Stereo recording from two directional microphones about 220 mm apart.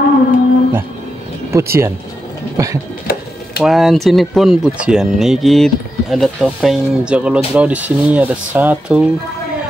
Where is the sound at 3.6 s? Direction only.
Centre (ahead or behind).